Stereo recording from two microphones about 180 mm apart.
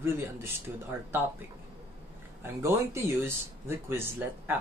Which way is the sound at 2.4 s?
15° right (ahead or behind).